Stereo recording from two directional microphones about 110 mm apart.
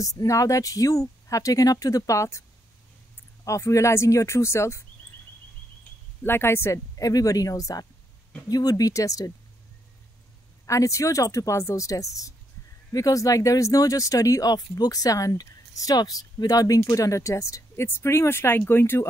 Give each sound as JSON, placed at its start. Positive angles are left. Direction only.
{"t": 0.0, "sound": "speech", "side_deg": 30}
{"t": 3.4, "sound": "speech", "side_deg": 30}
{"t": 6.2, "sound": "speech", "side_deg": 20}
{"t": 10.7, "sound": "speech", "side_deg": 30}